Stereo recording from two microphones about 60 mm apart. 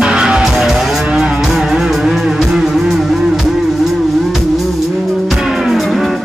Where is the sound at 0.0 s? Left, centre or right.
Centre.